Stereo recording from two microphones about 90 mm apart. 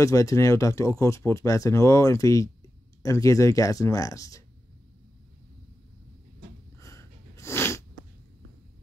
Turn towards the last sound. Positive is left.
turn(degrees=30)  # may be behind; listen again after turning